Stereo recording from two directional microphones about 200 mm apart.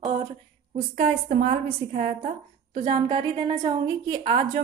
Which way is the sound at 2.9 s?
25° right (ahead or behind).